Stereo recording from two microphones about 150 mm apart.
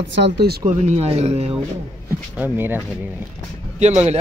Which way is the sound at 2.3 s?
10° right (ahead or behind).